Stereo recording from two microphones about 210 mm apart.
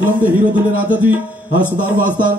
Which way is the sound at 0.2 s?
10° right (ahead or behind).